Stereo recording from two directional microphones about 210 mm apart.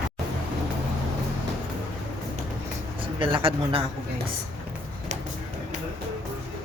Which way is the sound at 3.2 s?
25° right (ahead or behind).